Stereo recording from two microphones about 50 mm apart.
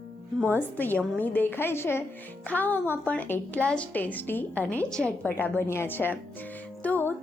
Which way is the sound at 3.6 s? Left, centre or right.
Left.